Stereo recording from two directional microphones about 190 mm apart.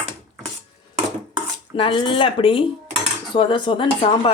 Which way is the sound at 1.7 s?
25° left (ahead or behind).